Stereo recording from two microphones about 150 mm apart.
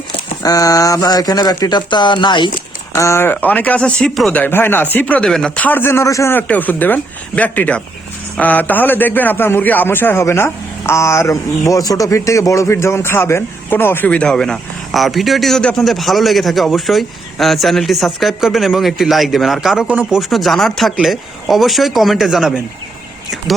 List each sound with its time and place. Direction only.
0.4 s speech: 25° left (ahead or behind)
2.9 s a man's voice: 20° left (ahead or behind); by 22.6 s centre (ahead or behind)